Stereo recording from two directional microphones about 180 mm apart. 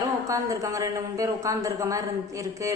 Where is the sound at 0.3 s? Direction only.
20° right (ahead or behind).